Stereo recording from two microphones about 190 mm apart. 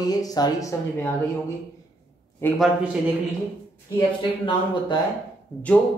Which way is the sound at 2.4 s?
10° left (ahead or behind).